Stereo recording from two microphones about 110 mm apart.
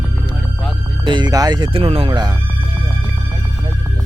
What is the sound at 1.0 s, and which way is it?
Speech, 40° right (ahead or behind).